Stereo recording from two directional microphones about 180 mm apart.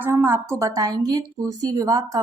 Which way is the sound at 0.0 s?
15° right (ahead or behind).